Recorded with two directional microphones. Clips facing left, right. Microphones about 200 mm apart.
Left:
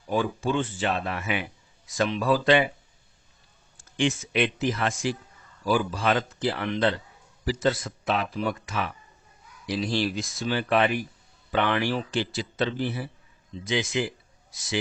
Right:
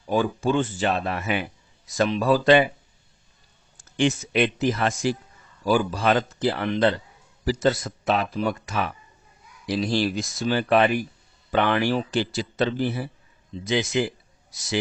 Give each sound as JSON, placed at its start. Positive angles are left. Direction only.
{"t": 0.1, "sound": "a man's voice", "side_deg": -40}
{"t": 3.9, "sound": "a man's voice", "side_deg": -40}